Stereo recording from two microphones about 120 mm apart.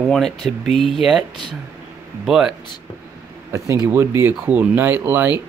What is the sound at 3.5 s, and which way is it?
Speech, 25° right (ahead or behind).